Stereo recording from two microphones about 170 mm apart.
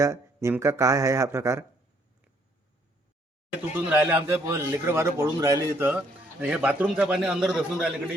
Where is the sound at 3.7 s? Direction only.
10° right (ahead or behind).